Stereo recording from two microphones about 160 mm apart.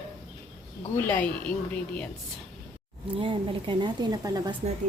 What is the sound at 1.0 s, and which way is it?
Speech, 10° left (ahead or behind).